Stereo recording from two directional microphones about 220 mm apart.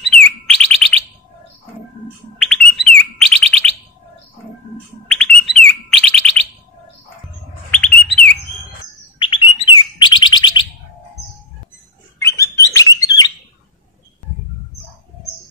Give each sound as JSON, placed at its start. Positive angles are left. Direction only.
{"t": 0.0, "sound": "bird", "side_deg": 5}
{"t": 2.3, "sound": "bird", "side_deg": 5}
{"t": 5.2, "sound": "bird", "side_deg": 5}
{"t": 7.7, "sound": "bird", "side_deg": 5}
{"t": 9.2, "sound": "bird", "side_deg": 25}
{"t": 12.2, "sound": "bird", "side_deg": 15}